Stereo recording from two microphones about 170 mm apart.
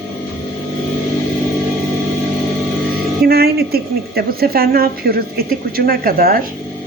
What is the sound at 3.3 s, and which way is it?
A woman's voice, 65° right (ahead or behind).